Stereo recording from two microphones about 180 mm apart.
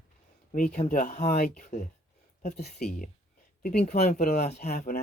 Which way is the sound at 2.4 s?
60° left (ahead or behind).